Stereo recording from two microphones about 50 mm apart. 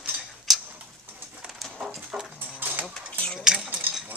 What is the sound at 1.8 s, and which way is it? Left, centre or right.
Dog, centre.